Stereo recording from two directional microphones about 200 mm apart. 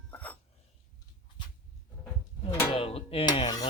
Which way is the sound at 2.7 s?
30° left (ahead or behind).